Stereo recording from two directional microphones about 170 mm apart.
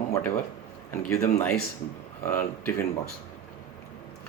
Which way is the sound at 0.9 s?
15° left (ahead or behind).